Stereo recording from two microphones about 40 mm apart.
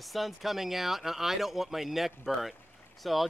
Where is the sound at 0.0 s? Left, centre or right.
Centre.